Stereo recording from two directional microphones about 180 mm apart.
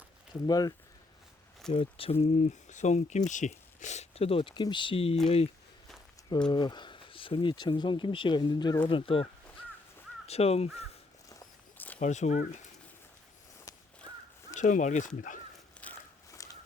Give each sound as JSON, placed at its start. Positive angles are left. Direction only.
{"t": 0.4, "sound": "speech", "side_deg": 20}
{"t": 1.7, "sound": "speech", "side_deg": 30}
{"t": 2.2, "sound": "speech", "side_deg": 40}
{"t": 6.5, "sound": "speech", "side_deg": 25}
{"t": 10.2, "sound": "speech", "side_deg": 35}
{"t": 11.3, "sound": "a sound", "side_deg": 15}
{"t": 11.9, "sound": "speech", "side_deg": 40}
{"t": 14.5, "sound": "speech", "side_deg": 45}
{"t": 15.8, "sound": "a sound", "side_deg": 15}